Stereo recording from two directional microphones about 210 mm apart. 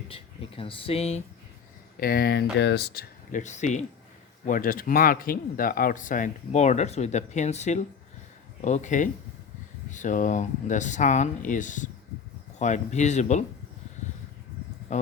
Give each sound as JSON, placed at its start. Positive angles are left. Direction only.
{"t": 0.1, "sound": "speech", "side_deg": 25}
{"t": 2.0, "sound": "speech", "side_deg": 45}